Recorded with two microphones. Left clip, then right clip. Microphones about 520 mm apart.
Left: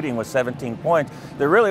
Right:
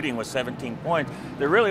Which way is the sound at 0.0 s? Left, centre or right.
Left.